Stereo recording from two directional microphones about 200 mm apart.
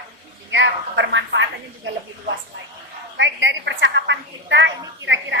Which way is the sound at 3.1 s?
65° right (ahead or behind).